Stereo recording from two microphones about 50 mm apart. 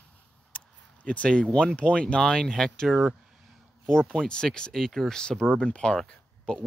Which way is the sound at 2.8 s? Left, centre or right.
Centre.